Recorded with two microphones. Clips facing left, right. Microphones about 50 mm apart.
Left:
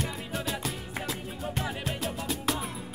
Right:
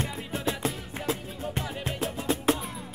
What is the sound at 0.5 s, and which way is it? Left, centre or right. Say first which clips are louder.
Music: right 6 dB; right.